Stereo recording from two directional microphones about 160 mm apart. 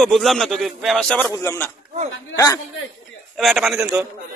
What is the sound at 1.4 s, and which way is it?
Speech, 15° left (ahead or behind).